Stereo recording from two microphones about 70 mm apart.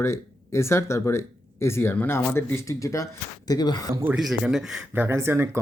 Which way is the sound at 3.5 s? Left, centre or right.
Left.